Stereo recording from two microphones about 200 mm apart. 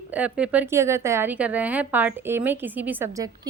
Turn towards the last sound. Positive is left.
turn(degrees=-15)  # may be behind; listen again after turning